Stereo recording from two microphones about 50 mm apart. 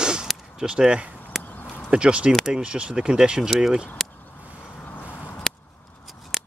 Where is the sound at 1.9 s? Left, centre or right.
Right.